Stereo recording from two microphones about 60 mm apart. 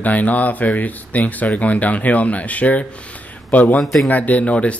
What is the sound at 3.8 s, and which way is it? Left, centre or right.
Speech, centre.